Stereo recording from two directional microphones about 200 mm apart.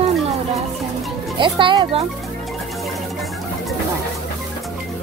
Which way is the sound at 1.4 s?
25° right (ahead or behind).